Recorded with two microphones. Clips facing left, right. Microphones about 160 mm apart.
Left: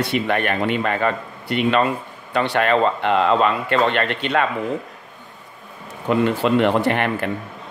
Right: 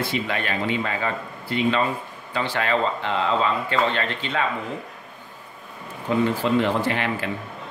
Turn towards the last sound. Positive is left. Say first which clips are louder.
# left 4 dB
turn(degrees=60)  # may be behind; listen again after turning